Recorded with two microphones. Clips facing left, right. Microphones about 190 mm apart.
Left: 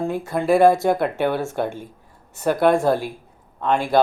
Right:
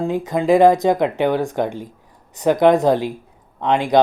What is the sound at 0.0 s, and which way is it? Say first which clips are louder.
Speech: right 3 dB; 15° right (ahead or behind).